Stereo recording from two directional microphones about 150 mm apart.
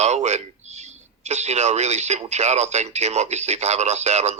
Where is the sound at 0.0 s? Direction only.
50° right (ahead or behind).